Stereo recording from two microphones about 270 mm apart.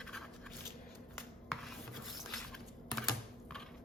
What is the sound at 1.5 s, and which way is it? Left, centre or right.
Rub, centre.